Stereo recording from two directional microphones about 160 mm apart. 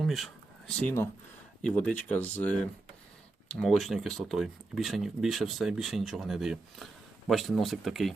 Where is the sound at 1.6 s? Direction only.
5° left (ahead or behind).